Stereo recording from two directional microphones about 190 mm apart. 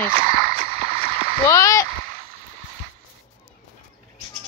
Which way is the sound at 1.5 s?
15° left (ahead or behind).